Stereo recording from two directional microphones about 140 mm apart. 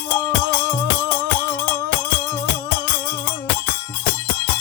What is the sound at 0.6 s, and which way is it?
Music, 20° left (ahead or behind).